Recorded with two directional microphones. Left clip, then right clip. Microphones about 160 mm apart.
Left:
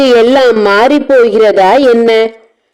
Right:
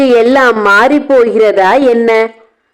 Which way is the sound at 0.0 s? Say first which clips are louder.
Left 1 dB; 25° left (ahead or behind).